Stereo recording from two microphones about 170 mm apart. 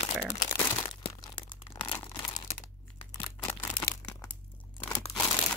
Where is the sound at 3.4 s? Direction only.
15° left (ahead or behind).